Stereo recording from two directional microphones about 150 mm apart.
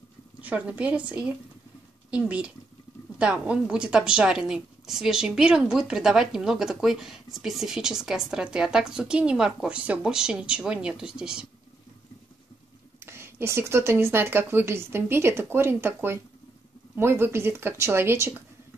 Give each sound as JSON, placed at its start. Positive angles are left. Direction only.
{"t": 0.4, "sound": "a woman's voice", "side_deg": -10}
{"t": 13.0, "sound": "speech", "side_deg": -15}